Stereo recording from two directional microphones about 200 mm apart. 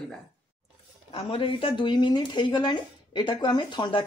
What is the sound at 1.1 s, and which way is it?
Speech, 25° left (ahead or behind).